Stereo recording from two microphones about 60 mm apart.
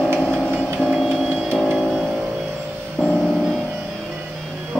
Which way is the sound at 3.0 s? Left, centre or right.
Centre.